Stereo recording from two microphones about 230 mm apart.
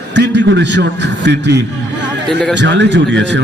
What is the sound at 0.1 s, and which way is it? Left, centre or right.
A man's voice, right.